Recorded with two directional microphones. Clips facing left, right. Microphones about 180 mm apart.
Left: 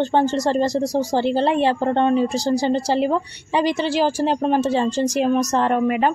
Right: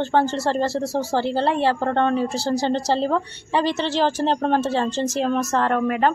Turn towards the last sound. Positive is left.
turn(degrees=15)  # may be behind; listen again after turning